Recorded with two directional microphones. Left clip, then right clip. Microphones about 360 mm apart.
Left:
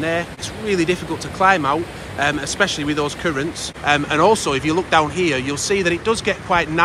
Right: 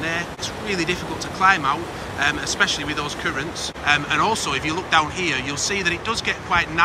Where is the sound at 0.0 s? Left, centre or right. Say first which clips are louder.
Left 3 dB; centre.